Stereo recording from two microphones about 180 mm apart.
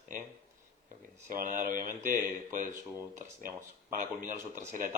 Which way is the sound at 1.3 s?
50° right (ahead or behind).